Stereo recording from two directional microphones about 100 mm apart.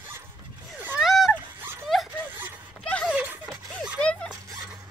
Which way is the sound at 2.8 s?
10° left (ahead or behind).